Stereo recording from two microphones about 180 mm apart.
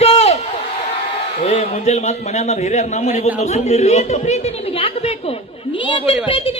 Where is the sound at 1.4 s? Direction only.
40° left (ahead or behind).